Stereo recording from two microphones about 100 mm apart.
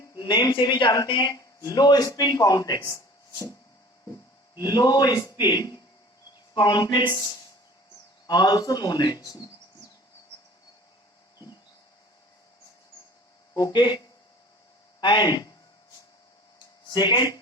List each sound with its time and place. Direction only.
0.2 s speech: 45° left (ahead or behind)
2.9 s a sound: 30° left (ahead or behind)
4.5 s a man's voice: 45° left (ahead or behind)
13.6 s a man's voice: 45° left (ahead or behind)
15.0 s a man's voice: 50° left (ahead or behind)
16.9 s a man's voice: 50° left (ahead or behind)